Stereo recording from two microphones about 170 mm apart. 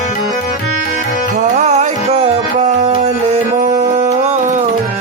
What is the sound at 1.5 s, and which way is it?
Music, 40° right (ahead or behind).